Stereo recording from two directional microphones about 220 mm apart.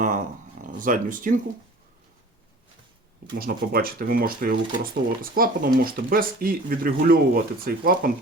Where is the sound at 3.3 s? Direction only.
45° right (ahead or behind).